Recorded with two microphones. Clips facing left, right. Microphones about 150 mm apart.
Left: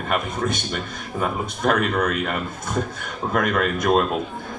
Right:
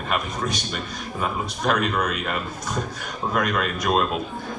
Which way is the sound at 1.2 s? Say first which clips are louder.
Left 3 dB; 50° left (ahead or behind).